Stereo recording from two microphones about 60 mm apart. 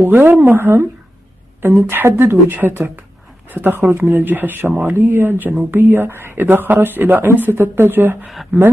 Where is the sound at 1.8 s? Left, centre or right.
Right.